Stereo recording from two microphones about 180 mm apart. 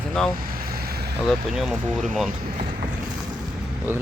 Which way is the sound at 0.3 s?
55° right (ahead or behind).